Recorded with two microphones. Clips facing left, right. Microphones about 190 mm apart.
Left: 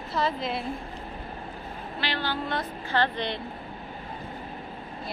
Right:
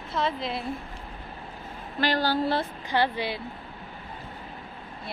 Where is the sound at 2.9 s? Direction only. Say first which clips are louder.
Even; 10° right (ahead or behind).